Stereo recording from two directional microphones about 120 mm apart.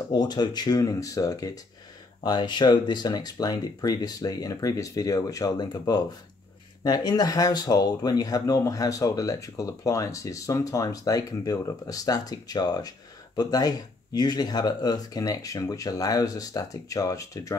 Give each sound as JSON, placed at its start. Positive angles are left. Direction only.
{"t": 0.1, "sound": "speech", "side_deg": 35}